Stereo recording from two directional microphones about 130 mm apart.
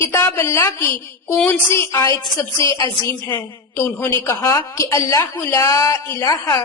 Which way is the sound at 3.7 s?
15° left (ahead or behind).